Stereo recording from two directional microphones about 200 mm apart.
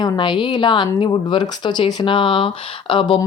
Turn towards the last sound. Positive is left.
turn(degrees=25)  # may be behind; listen again after turning